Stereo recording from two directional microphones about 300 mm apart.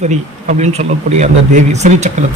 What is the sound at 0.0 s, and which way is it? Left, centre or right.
Speech, right.